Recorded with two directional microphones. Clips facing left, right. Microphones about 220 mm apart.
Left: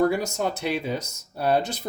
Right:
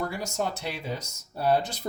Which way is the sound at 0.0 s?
65° left (ahead or behind).